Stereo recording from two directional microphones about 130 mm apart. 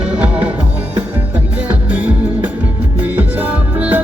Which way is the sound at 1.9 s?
10° right (ahead or behind).